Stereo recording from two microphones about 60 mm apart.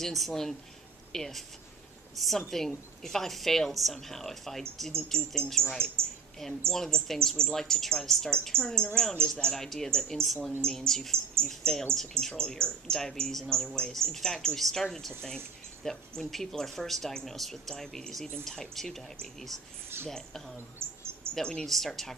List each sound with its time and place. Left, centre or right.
0.0 s a woman's voice: centre
6.0 s speech: right
6.7 s speech: centre
21.6 s a woman's voice: centre